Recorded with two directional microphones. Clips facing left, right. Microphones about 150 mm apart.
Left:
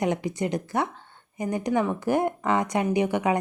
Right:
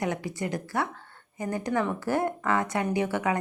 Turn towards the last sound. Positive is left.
turn(degrees=20)  # may be behind; listen again after turning